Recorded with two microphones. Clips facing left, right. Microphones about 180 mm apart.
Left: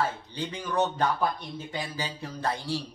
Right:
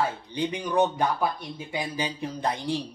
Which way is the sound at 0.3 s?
15° right (ahead or behind).